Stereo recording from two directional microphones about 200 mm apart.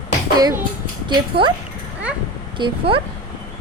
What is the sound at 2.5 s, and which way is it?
Speech, 25° right (ahead or behind).